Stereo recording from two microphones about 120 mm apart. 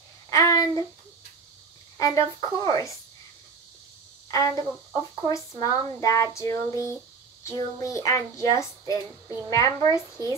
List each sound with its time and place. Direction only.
0.3 s speech: 25° left (ahead or behind)
2.0 s a woman's voice: 25° left (ahead or behind)
4.3 s a woman's voice: 25° left (ahead or behind)